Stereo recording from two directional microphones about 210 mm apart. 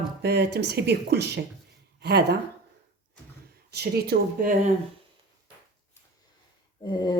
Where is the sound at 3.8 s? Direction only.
50° right (ahead or behind).